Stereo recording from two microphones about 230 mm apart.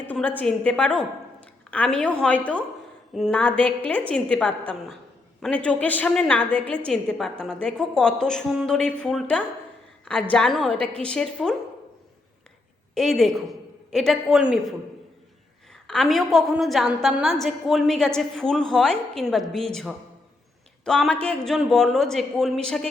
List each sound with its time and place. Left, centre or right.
0.1 s a woman's voice: centre
12.9 s a man's voice: centre
15.9 s a woman's voice: centre